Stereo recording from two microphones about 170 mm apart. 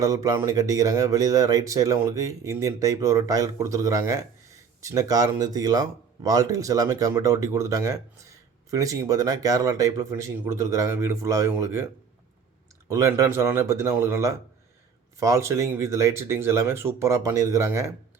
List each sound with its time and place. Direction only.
0.0 s speech: 20° right (ahead or behind)
12.9 s speech: 15° right (ahead or behind)